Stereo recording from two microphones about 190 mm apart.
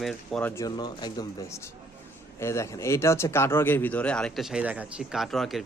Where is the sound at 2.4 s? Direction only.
15° left (ahead or behind).